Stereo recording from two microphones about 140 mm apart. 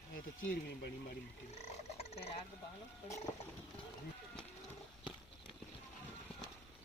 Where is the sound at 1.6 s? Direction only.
50° left (ahead or behind).